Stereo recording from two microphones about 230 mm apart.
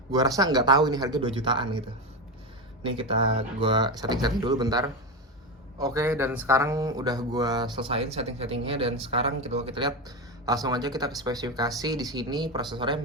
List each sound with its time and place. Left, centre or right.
0.1 s speech: centre
3.6 s speech: centre